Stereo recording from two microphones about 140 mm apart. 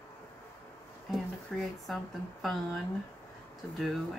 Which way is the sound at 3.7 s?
Centre (ahead or behind).